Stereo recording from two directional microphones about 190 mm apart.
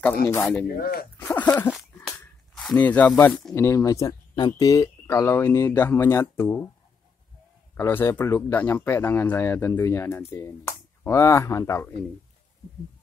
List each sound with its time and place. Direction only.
0.0 s speech: 5° left (ahead or behind)
0.7 s speech: 50° left (ahead or behind)
1.1 s speech: 10° left (ahead or behind)
7.7 s speech: 10° left (ahead or behind)